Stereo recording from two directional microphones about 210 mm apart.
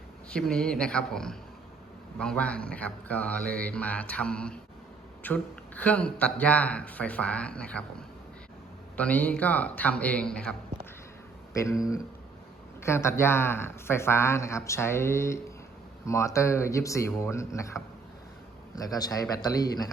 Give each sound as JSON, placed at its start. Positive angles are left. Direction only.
{"t": 0.3, "sound": "speech", "side_deg": 5}
{"t": 9.0, "sound": "speech", "side_deg": 5}
{"t": 11.5, "sound": "speech", "side_deg": 15}
{"t": 12.8, "sound": "speech", "side_deg": 10}
{"t": 18.8, "sound": "speech", "side_deg": 15}